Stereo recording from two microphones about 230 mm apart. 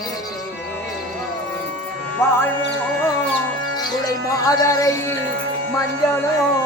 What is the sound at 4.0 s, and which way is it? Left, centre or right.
Speech, centre.